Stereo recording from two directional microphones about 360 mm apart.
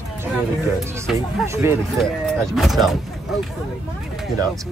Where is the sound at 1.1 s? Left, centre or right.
Centre.